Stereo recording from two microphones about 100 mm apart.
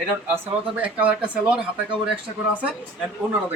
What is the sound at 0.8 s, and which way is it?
Speech, 15° right (ahead or behind).